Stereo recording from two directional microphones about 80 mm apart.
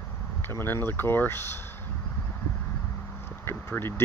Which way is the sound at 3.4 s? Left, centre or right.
Left.